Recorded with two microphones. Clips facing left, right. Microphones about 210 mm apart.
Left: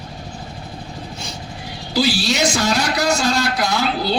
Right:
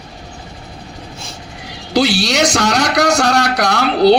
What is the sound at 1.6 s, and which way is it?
A man's voice, 70° right (ahead or behind).